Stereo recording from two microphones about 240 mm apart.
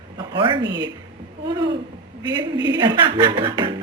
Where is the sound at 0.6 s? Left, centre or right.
Right.